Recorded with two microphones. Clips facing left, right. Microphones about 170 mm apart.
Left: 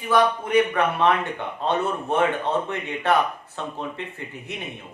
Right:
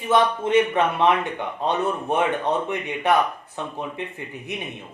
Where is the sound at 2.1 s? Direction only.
15° right (ahead or behind).